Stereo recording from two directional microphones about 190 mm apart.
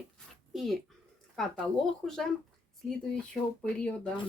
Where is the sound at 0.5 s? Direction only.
Centre (ahead or behind).